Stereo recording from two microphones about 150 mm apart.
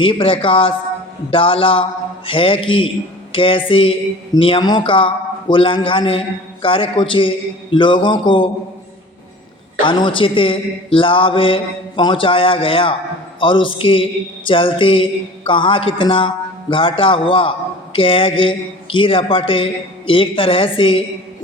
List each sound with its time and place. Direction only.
0.0 s a man's voice: 35° left (ahead or behind)
9.8 s a man's voice: 35° left (ahead or behind)